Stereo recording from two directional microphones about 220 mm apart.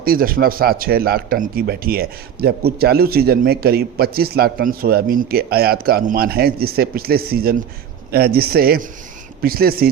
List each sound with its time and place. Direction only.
0.0 s a man's voice: 40° right (ahead or behind)